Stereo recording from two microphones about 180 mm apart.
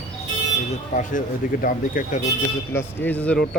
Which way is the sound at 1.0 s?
50° left (ahead or behind).